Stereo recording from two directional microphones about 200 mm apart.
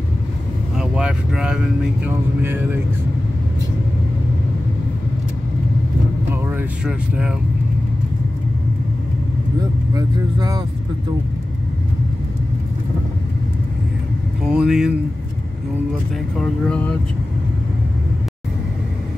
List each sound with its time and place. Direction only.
0.7 s speech: 5° right (ahead or behind)
6.3 s speech: 5° right (ahead or behind)
9.9 s speech: 20° right (ahead or behind)
14.5 s speech: 5° right (ahead or behind)
16.3 s speech: 5° left (ahead or behind)